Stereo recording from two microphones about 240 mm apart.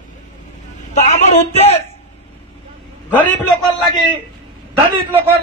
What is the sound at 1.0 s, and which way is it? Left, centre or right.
Speech, left.